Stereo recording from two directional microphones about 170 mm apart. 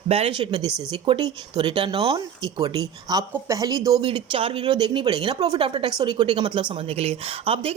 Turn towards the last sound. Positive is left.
turn(degrees=-35)  # may be behind; listen again after turning